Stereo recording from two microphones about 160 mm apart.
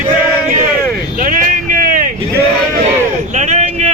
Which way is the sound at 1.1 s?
55° right (ahead or behind).